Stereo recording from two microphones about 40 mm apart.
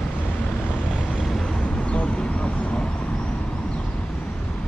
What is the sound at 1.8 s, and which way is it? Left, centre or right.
Vehicle, left.